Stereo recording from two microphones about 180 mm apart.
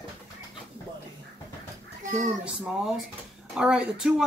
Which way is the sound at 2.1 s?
40° right (ahead or behind).